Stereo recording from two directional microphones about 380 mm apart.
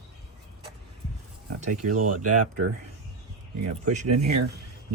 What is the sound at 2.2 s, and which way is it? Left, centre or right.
Speech, right.